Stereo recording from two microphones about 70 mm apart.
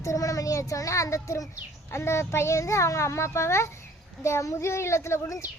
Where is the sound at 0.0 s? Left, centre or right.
Left.